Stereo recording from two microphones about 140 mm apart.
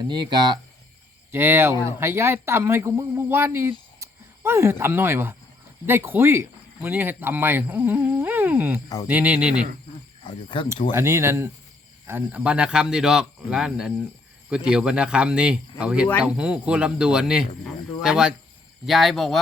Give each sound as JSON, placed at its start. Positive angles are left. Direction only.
{"t": 0.1, "sound": "speech", "side_deg": -30}
{"t": 1.3, "sound": "speech", "side_deg": -15}
{"t": 1.7, "sound": "speech", "side_deg": 35}
{"t": 2.0, "sound": "speech", "side_deg": -20}
{"t": 10.2, "sound": "speech", "side_deg": 35}
{"t": 10.9, "sound": "speech", "side_deg": -20}